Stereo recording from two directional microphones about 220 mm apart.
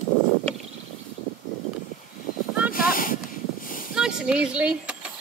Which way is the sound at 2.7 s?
40° left (ahead or behind).